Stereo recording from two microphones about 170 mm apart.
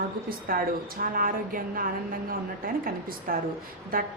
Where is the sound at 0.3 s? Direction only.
60° right (ahead or behind).